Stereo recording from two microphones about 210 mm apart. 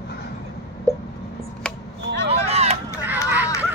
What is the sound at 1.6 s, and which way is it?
Chop, 5° left (ahead or behind).